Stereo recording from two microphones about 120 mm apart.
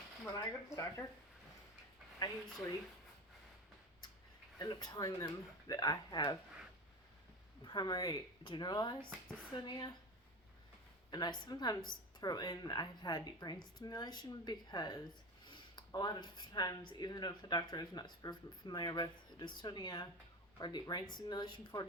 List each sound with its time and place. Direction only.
0.3 s speech: 25° left (ahead or behind)
4.5 s speech: 30° left (ahead or behind)
7.6 s speech: 40° left (ahead or behind)
11.1 s speech: 35° left (ahead or behind)